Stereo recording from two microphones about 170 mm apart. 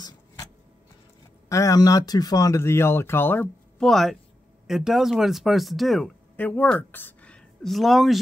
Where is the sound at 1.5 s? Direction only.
20° left (ahead or behind).